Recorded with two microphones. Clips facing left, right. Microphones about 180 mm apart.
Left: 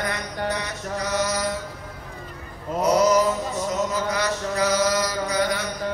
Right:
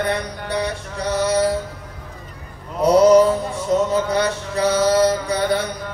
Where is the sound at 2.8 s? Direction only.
30° right (ahead or behind).